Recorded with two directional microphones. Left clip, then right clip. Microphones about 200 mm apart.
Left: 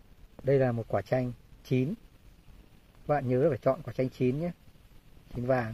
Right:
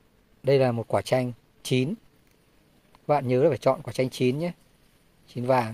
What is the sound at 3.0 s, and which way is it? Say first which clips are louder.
Speech: right 5 dB; 20° right (ahead or behind).